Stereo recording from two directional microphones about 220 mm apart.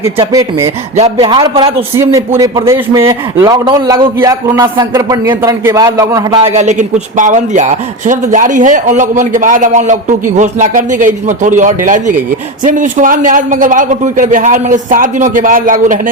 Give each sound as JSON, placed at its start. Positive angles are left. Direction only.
{"t": 0.2, "sound": "a man's voice", "side_deg": -15}
{"t": 0.9, "sound": "a man's voice", "side_deg": -25}
{"t": 2.0, "sound": "a man's voice", "side_deg": -15}
{"t": 6.5, "sound": "speech", "side_deg": -35}